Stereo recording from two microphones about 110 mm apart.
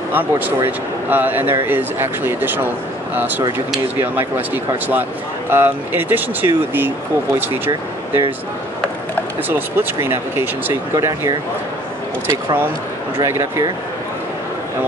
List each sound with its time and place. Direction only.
0.1 s speech: 15° right (ahead or behind)
4.0 s speech: 20° right (ahead or behind)
5.5 s speech: 20° right (ahead or behind)
9.5 s speech: 20° right (ahead or behind)
13.2 s speech: 30° right (ahead or behind)